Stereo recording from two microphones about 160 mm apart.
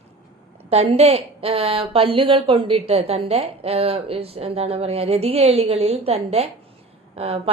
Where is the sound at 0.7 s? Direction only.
40° right (ahead or behind).